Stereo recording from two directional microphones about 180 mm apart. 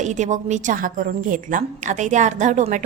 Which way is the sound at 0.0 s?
40° right (ahead or behind).